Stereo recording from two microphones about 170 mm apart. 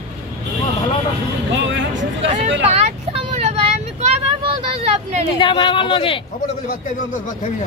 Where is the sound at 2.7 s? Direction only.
35° right (ahead or behind).